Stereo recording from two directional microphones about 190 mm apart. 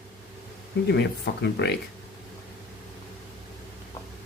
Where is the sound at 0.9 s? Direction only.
60° left (ahead or behind).